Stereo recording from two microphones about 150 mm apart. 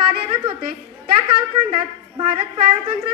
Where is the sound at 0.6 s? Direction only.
70° right (ahead or behind).